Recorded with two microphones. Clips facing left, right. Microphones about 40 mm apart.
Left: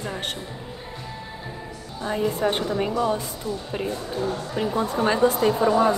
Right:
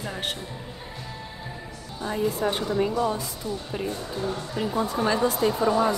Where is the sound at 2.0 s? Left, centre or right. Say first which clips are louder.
Left 2 dB; left.